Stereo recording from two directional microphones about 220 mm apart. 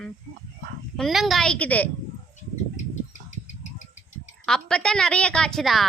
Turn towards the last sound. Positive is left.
turn(degrees=0)  # may be behind; listen again after turning